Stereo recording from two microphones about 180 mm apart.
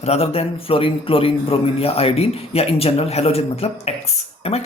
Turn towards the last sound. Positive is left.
turn(degrees=30)  # may be behind; listen again after turning